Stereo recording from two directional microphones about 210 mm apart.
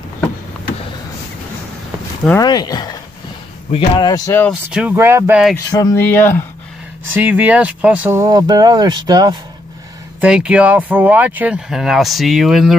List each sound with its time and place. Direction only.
2.4 s speech: 20° left (ahead or behind)
4.5 s speech: 5° right (ahead or behind)
5.7 s speech: 15° left (ahead or behind)
7.1 s speech: 10° right (ahead or behind)
10.2 s speech: 5° right (ahead or behind)